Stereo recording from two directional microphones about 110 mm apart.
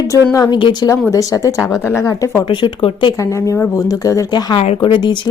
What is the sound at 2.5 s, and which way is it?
Speech, 50° left (ahead or behind).